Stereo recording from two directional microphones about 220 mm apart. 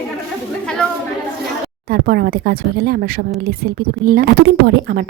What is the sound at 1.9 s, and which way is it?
Speech, 45° right (ahead or behind).